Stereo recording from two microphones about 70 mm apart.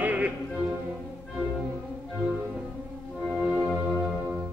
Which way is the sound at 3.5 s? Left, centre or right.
Centre.